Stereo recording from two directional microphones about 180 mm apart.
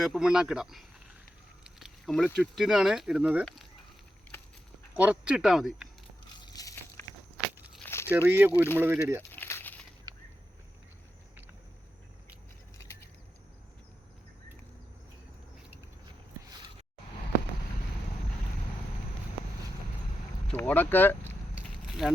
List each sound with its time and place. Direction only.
0.0 s speech: 5° right (ahead or behind)
4.9 s speech: 10° right (ahead or behind)
6.4 s a sound: 20° left (ahead or behind)
7.8 s crumpling: 15° left (ahead or behind)
8.1 s speech: 10° right (ahead or behind)
9.3 s snake: 10° left (ahead or behind)
10.1 s a sound: 20° right (ahead or behind)
20.5 s speech: 10° left (ahead or behind)
21.5 s crackle: centre (ahead or behind)